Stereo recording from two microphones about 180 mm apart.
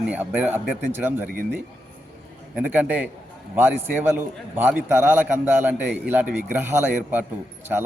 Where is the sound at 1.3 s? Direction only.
55° right (ahead or behind).